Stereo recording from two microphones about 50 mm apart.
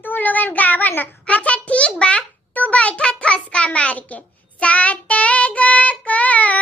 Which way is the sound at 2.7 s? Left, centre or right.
Left.